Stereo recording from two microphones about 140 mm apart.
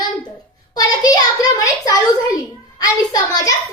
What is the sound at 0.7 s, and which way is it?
A woman's voice, 30° left (ahead or behind).